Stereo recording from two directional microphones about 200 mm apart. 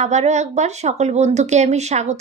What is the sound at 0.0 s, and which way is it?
Speech, 35° right (ahead or behind).